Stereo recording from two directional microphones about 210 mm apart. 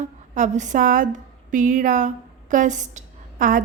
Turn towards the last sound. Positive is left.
turn(degrees=-40)  # may be behind; listen again after turning